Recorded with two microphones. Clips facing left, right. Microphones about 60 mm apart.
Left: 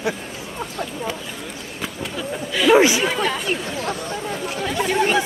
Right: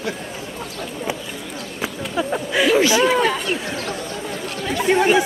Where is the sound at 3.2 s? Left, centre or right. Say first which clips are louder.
Right 2 dB; centre.